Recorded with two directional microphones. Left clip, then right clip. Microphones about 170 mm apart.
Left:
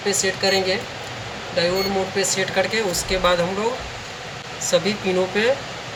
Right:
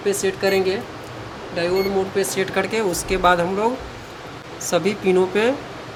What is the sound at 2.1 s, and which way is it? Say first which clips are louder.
Speech: left 1 dB; 60° right (ahead or behind).